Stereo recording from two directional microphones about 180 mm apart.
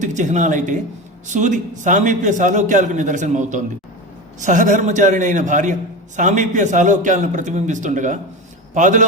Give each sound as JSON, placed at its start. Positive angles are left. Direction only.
{"t": 0.0, "sound": "a man's voice", "side_deg": -45}